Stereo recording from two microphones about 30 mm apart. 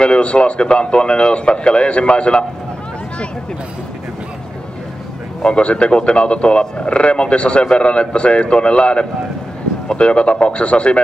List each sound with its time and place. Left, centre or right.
0.0 s speech: left
5.4 s speech: left